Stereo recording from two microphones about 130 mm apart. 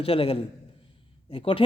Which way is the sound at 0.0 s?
45° left (ahead or behind).